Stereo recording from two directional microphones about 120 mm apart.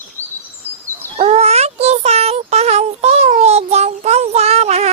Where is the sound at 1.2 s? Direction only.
60° right (ahead or behind).